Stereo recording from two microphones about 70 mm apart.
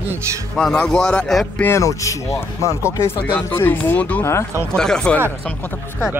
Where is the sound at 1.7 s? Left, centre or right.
Left.